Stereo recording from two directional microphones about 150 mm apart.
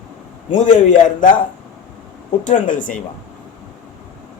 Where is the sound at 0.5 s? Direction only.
55° left (ahead or behind).